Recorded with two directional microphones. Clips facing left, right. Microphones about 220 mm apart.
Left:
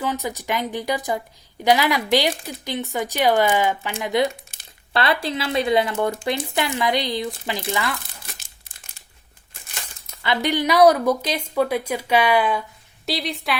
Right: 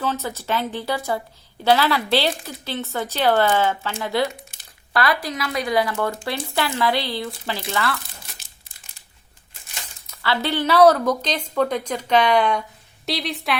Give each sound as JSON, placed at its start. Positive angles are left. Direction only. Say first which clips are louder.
{"t": 0.0, "sound": "speech", "louder": "even", "side_deg": 15}
{"t": 10.2, "sound": "a woman's voice", "louder": "left 1 dB", "side_deg": 15}